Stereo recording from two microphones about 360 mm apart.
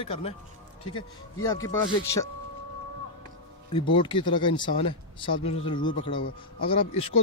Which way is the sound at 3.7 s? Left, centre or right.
Centre.